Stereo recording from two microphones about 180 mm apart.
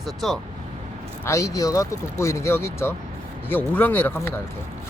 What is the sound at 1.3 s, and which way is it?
Speech, 15° left (ahead or behind).